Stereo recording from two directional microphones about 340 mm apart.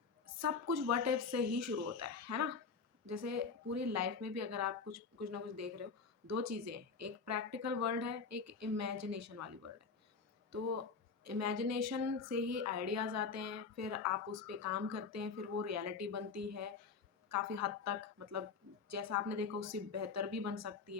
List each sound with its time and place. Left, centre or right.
0.3 s a woman's voice: right